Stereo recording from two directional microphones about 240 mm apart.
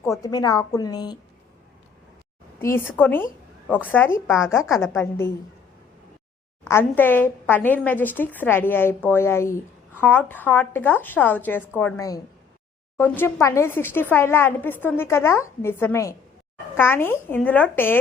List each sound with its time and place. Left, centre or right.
0.0 s a woman's voice: centre
2.6 s a woman's voice: centre
6.7 s a woman's voice: centre